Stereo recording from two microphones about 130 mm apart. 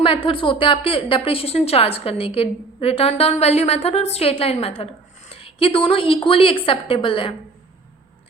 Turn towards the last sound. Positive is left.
turn(degrees=40)  # may be behind; listen again after turning